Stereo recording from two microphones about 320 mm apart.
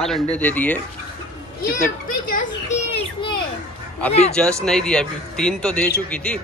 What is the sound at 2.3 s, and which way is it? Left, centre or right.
Children playing, left.